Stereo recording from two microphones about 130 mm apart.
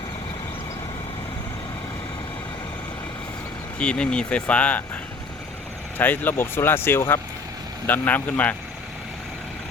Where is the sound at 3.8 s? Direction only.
5° left (ahead or behind).